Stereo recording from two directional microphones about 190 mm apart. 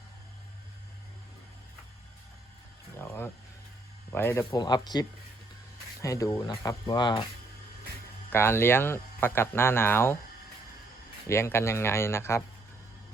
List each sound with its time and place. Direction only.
4.1 s speech: 15° left (ahead or behind)
8.3 s speech: 15° left (ahead or behind)
11.3 s speech: 15° left (ahead or behind)